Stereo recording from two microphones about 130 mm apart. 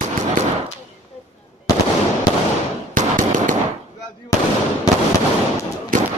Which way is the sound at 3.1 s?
90° right.